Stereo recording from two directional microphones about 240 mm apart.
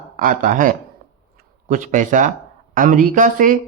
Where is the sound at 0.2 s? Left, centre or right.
Right.